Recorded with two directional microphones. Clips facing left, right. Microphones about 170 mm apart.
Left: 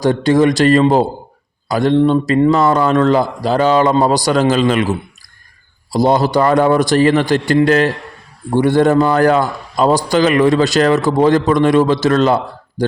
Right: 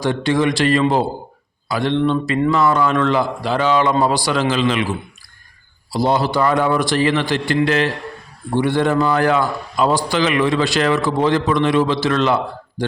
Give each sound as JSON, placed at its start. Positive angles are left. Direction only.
{"t": 0.0, "sound": "a man's voice", "side_deg": 40}